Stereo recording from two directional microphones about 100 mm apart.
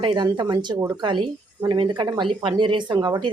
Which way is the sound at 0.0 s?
50° right (ahead or behind).